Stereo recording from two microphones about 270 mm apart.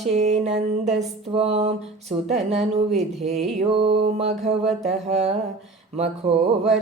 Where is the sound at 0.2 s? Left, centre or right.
Right.